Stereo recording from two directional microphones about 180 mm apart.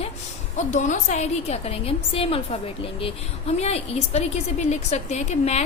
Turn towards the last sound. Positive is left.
turn(degrees=40)  # may be behind; listen again after turning